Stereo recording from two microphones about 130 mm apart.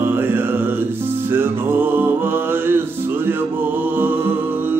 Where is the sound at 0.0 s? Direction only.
15° right (ahead or behind).